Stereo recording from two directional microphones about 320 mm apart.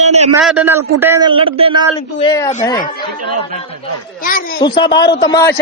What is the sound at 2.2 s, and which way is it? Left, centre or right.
Speech, centre.